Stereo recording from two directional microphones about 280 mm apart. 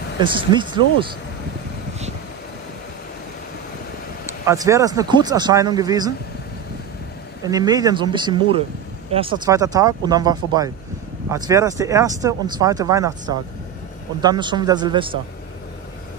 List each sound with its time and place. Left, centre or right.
0.2 s speech: centre
4.5 s speech: centre
7.4 s speech: centre